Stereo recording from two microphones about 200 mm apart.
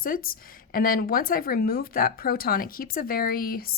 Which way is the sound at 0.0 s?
45° left (ahead or behind).